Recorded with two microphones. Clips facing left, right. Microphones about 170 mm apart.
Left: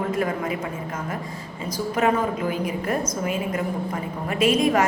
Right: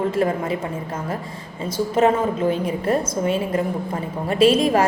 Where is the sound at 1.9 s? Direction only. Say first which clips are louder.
Right 4 dB; 25° right (ahead or behind).